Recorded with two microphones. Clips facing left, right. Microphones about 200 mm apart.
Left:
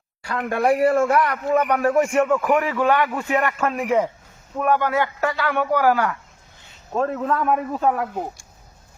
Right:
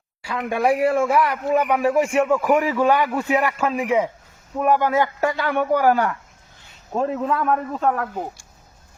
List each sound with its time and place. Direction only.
0.3 s speech: centre (ahead or behind)
2.6 s a man's voice: 10° right (ahead or behind)
7.4 s a man's voice: 5° left (ahead or behind)